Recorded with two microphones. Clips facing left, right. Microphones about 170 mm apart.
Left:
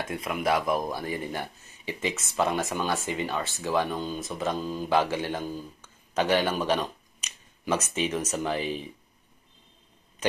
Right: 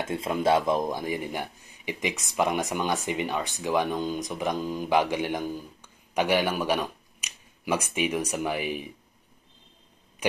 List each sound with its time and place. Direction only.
0.0 s speech: 25° right (ahead or behind)